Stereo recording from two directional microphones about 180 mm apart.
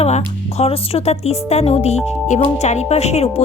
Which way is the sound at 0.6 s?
35° left (ahead or behind).